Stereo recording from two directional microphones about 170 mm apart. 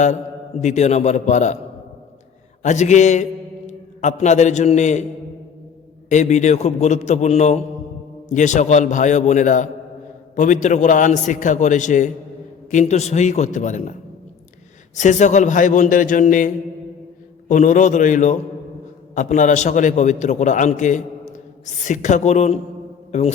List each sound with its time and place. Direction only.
0.6 s a man's voice: 40° left (ahead or behind)
2.6 s a man's voice: 45° left (ahead or behind)
6.1 s a man's voice: 45° left (ahead or behind)
14.9 s a man's voice: 45° left (ahead or behind)
17.5 s a man's voice: 50° left (ahead or behind)